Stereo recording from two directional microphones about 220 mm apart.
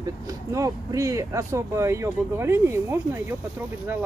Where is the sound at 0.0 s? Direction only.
15° right (ahead or behind).